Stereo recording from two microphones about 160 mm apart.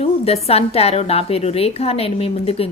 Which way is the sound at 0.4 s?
40° left (ahead or behind).